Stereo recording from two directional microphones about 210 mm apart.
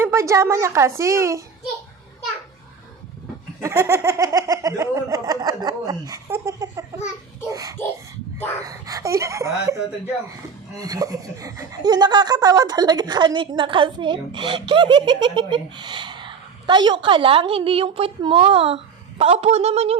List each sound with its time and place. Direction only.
0.0 s snicker: 15° right (ahead or behind)
3.6 s snicker: 10° right (ahead or behind)
10.8 s speech: 15° right (ahead or behind)